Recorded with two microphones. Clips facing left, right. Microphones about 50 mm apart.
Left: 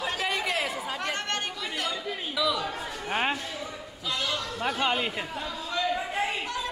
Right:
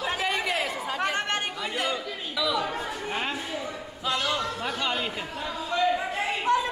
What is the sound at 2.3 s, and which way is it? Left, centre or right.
Chatter, centre.